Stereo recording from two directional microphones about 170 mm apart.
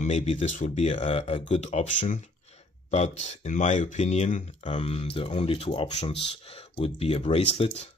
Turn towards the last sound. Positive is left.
turn(degrees=35)  # may be behind; listen again after turning